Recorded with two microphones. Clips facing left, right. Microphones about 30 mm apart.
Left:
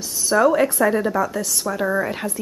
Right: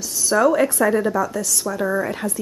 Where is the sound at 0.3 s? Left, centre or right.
Centre.